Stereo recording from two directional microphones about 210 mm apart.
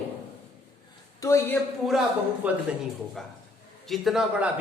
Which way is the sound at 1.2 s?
10° left (ahead or behind).